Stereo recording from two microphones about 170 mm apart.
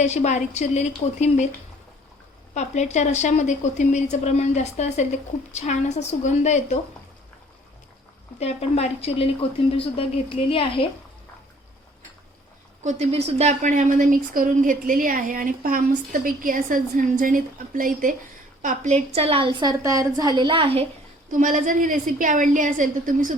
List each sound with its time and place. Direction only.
0.0 s speech: 40° left (ahead or behind)
2.6 s speech: 45° left (ahead or behind)
8.4 s a woman's voice: 40° left (ahead or behind)
12.8 s a woman's voice: 40° right (ahead or behind)
21.2 s a woman's voice: 50° right (ahead or behind)